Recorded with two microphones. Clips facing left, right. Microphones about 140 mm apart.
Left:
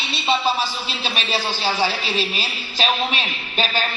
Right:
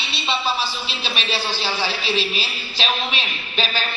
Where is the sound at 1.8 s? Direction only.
45° left (ahead or behind).